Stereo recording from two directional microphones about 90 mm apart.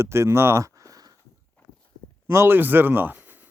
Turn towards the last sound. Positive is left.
turn(degrees=-20)  # may be behind; listen again after turning